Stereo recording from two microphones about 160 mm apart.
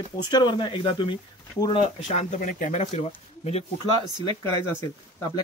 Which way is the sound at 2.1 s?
45° left (ahead or behind).